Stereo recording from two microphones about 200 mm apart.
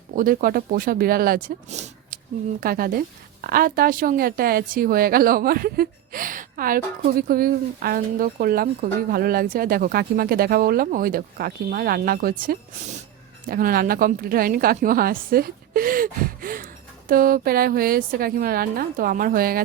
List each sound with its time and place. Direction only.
0.2 s a woman's voice: 45° right (ahead or behind)